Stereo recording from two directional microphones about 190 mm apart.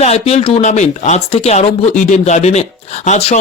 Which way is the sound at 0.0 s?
35° left (ahead or behind).